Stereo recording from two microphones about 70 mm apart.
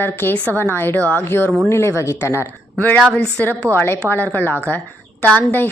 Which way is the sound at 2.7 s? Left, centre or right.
Left.